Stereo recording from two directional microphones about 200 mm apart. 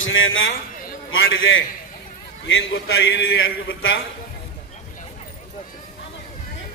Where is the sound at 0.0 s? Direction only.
75° left (ahead or behind).